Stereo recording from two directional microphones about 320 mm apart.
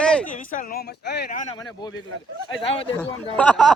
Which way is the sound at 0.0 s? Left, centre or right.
Centre.